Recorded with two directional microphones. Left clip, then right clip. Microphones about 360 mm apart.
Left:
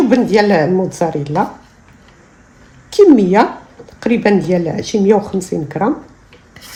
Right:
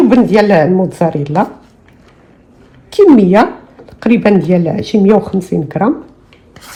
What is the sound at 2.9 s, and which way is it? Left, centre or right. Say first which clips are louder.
Speech: right 2 dB; centre.